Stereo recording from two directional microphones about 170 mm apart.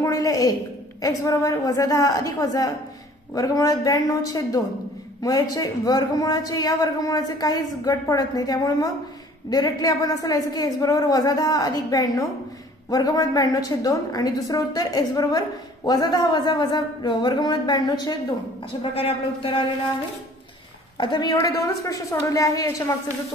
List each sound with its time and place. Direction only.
0.0 s a woman's voice: 20° left (ahead or behind)
21.0 s a woman's voice: 25° left (ahead or behind)